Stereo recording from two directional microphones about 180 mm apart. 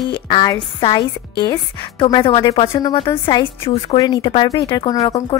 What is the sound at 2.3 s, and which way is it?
Speech, 20° left (ahead or behind).